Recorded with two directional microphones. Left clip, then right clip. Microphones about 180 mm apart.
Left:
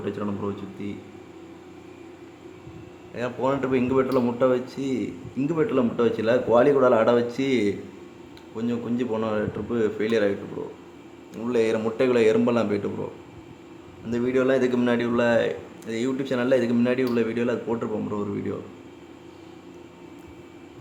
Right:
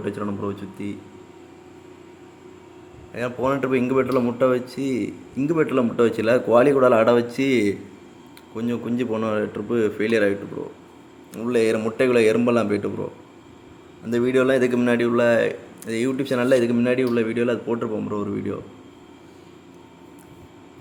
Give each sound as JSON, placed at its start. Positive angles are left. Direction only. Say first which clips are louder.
{"t": 0.0, "sound": "a man's voice", "louder": "right 2 dB", "side_deg": -10}
{"t": 3.2, "sound": "a man's voice", "louder": "right 2 dB", "side_deg": -10}
{"t": 11.3, "sound": "a man's voice", "louder": "right 3 dB", "side_deg": -15}
{"t": 14.1, "sound": "a man's voice", "louder": "right 3 dB", "side_deg": -20}